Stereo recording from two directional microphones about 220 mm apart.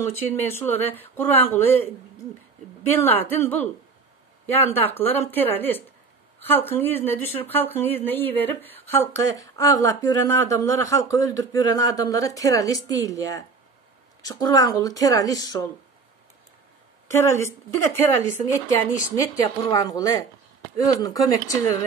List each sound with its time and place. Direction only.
0.0 s speech: 10° left (ahead or behind)
17.1 s speech: 10° left (ahead or behind)